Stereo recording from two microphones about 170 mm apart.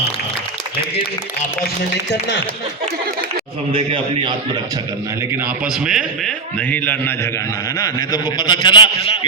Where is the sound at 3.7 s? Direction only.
30° right (ahead or behind).